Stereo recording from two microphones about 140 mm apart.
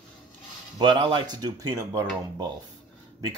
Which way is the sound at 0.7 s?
35° right (ahead or behind).